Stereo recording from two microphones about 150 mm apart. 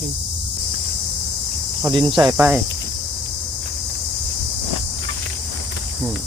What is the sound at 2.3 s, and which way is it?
Cricket, 15° right (ahead or behind).